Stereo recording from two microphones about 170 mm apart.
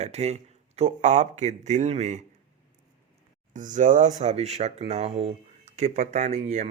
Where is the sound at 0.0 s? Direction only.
40° right (ahead or behind).